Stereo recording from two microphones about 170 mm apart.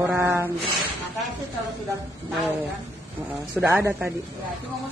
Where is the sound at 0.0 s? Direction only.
15° right (ahead or behind).